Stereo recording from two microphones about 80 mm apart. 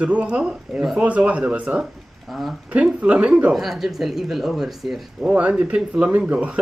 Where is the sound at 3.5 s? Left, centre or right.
Centre.